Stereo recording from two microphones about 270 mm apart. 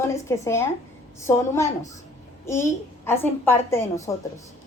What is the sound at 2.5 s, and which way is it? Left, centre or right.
A woman's voice, centre.